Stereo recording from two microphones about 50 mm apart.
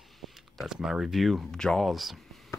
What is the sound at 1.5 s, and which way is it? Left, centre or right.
Speech, centre.